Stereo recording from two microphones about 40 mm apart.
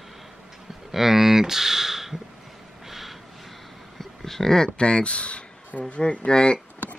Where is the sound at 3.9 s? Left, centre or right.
Centre.